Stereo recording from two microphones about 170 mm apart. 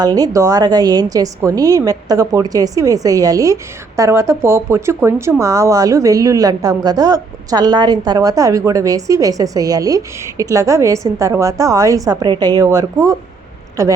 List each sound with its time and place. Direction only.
0.0 s a woman's voice: 20° right (ahead or behind)